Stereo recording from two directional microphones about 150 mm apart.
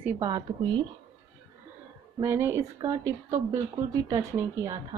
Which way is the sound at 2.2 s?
15° right (ahead or behind).